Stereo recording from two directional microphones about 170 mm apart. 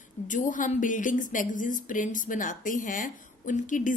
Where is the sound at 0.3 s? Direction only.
50° left (ahead or behind).